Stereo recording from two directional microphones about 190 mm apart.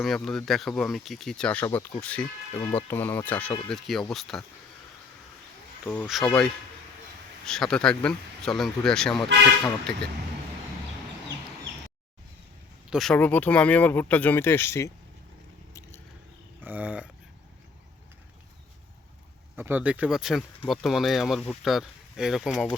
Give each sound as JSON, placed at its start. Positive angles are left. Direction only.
{"t": 0.0, "sound": "speech", "side_deg": 0}
{"t": 2.6, "sound": "speech", "side_deg": 25}
{"t": 2.9, "sound": "speech", "side_deg": 10}
{"t": 5.8, "sound": "speech", "side_deg": 0}
{"t": 12.9, "sound": "speech", "side_deg": 0}
{"t": 16.6, "sound": "a sound", "side_deg": -10}
{"t": 19.5, "sound": "speech", "side_deg": -10}